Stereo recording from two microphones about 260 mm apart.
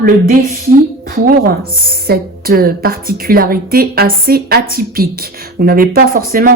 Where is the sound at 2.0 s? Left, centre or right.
Right.